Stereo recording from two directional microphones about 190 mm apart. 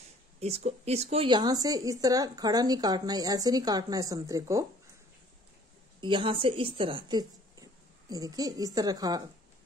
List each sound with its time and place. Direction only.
0.4 s speech: 35° right (ahead or behind); by 4.6 s 15° right (ahead or behind)
5.9 s speech: 25° right (ahead or behind)